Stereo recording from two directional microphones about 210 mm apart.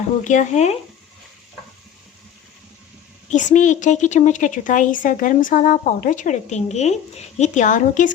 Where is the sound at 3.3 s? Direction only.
35° left (ahead or behind).